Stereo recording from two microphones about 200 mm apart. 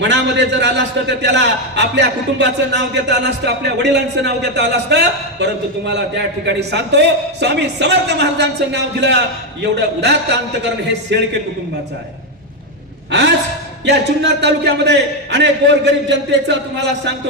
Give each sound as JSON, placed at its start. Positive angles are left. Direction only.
{"t": 0.0, "sound": "a man's voice", "side_deg": -60}
{"t": 13.1, "sound": "a woman's voice", "side_deg": -60}